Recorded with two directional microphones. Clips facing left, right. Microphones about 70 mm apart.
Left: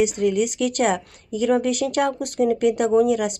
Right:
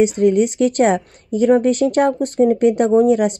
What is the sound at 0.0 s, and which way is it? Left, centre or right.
Speech, right.